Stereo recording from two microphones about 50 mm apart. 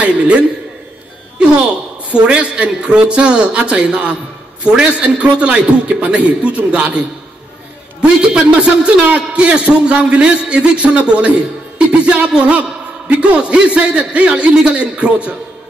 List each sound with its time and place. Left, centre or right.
0.0 s a man's voice: right
2.0 s a man's voice: right